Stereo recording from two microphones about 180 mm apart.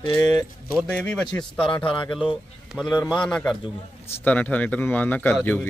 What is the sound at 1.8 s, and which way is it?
Speech, 25° left (ahead or behind).